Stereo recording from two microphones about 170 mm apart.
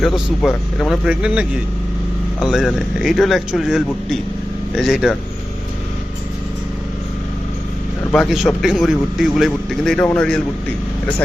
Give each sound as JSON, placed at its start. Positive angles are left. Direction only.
{"t": 0.0, "sound": "a man's voice", "side_deg": 0}
{"t": 8.1, "sound": "a man's voice", "side_deg": 0}